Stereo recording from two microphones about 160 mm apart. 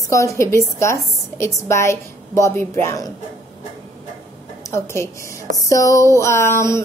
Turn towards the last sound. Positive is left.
turn(degrees=15)  # may be behind; listen again after turning